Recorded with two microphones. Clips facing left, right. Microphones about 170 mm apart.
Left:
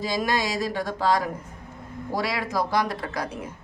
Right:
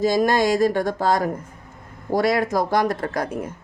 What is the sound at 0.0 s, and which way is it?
Speech, 45° right (ahead or behind).